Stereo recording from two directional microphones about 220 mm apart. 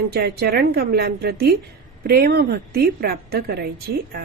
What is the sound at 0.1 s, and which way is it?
A woman's voice, 45° right (ahead or behind).